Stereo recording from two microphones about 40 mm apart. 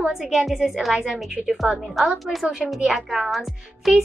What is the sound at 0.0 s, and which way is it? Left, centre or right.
A woman's voice, centre.